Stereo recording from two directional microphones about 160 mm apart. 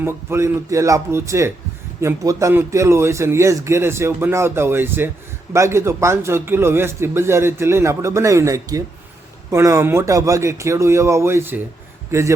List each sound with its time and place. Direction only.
0.0 s a man's voice: 15° right (ahead or behind)